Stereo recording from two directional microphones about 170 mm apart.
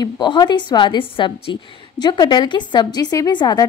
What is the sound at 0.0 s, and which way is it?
A woman's voice, 25° left (ahead or behind).